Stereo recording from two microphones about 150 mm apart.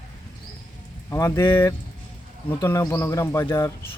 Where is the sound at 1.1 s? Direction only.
20° left (ahead or behind).